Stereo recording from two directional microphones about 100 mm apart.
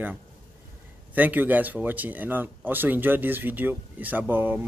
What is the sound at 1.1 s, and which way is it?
Speech, 15° right (ahead or behind).